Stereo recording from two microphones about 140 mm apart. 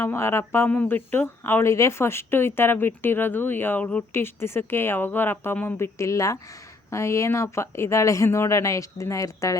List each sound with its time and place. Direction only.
0.0 s speech: 20° left (ahead or behind)